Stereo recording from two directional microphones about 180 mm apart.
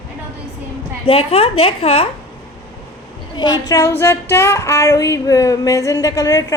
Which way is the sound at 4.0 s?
15° left (ahead or behind).